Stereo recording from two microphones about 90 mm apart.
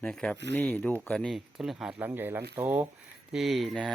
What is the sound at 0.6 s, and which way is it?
Speech, 20° left (ahead or behind).